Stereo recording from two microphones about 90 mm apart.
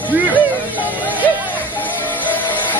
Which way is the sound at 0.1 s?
20° right (ahead or behind).